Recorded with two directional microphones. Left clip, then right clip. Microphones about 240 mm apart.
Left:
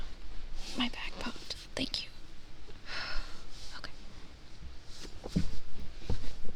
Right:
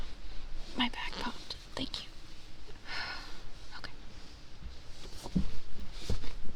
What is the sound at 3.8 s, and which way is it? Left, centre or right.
Whispering, centre.